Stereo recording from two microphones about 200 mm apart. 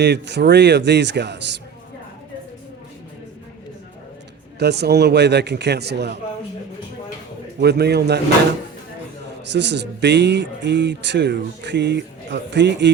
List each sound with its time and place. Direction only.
0.0 s speech: 60° right (ahead or behind)
4.6 s speech: 55° right (ahead or behind)
7.6 s speech: 55° right (ahead or behind)
9.5 s speech: 60° right (ahead or behind)